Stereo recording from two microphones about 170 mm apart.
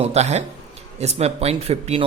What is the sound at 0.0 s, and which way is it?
Speech, 40° right (ahead or behind).